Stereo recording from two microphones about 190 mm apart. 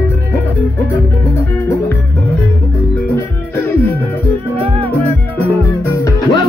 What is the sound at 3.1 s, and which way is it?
Music, 10° left (ahead or behind).